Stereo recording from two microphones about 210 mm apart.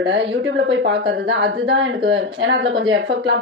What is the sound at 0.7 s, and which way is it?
Speech, 55° right (ahead or behind).